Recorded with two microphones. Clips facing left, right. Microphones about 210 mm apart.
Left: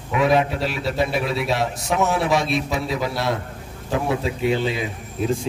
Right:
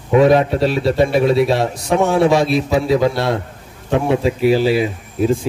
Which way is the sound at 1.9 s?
30° right (ahead or behind).